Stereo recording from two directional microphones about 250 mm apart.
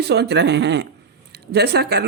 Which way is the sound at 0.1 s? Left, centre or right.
Right.